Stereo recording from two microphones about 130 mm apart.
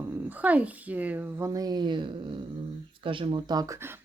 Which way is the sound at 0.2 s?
10° right (ahead or behind).